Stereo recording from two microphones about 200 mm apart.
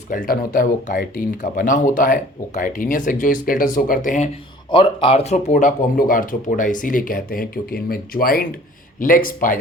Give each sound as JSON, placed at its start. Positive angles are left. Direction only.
{"t": 0.1, "sound": "speech", "side_deg": 45}
{"t": 4.7, "sound": "speech", "side_deg": 25}